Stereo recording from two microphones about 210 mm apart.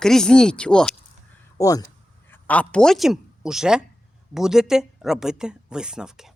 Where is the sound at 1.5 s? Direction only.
15° left (ahead or behind).